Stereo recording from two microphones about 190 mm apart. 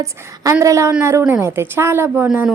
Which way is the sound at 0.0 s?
15° right (ahead or behind).